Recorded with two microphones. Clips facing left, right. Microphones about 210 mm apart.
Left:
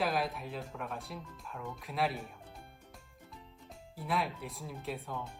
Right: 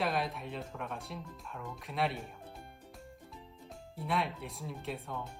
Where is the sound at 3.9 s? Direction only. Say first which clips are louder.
Even; centre (ahead or behind).